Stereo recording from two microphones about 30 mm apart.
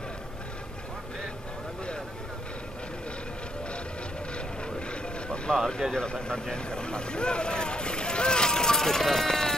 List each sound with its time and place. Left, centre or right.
5.5 s speech: centre
5.9 s speech: left